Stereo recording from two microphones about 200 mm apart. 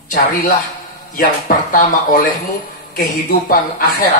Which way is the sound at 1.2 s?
45° left (ahead or behind).